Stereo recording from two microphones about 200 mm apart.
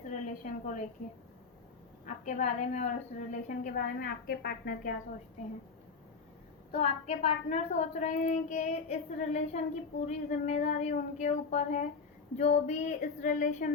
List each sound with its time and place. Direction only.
0.1 s a woman's voice: 40° left (ahead or behind)
2.0 s a woman's voice: 40° left (ahead or behind)
6.7 s a woman's voice: 30° left (ahead or behind)